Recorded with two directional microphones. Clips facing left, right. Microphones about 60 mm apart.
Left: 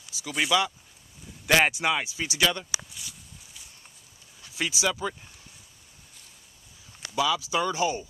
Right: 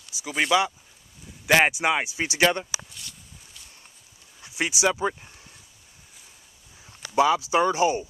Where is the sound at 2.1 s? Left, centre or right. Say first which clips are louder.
Right 4 dB; right.